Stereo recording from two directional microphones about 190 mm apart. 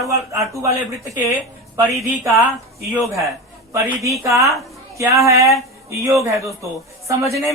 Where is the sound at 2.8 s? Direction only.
Centre (ahead or behind).